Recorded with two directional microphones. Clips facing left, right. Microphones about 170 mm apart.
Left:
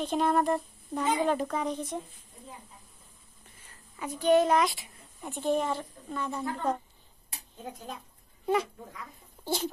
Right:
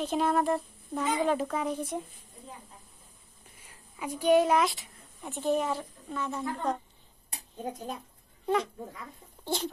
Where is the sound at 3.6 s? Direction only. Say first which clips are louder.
Right 1 dB; 10° right (ahead or behind).